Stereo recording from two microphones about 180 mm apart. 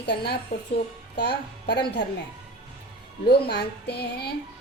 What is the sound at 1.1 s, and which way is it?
Speech, 65° left (ahead or behind).